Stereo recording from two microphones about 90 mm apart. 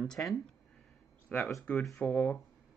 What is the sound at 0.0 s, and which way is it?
Speech, centre (ahead or behind).